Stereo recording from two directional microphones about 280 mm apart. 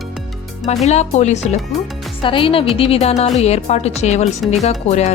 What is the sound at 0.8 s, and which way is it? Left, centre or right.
A woman's voice, left.